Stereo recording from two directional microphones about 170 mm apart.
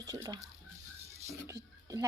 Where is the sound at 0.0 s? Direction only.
20° right (ahead or behind).